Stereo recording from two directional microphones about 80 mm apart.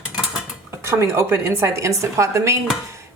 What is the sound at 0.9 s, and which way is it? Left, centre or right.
Speech, right.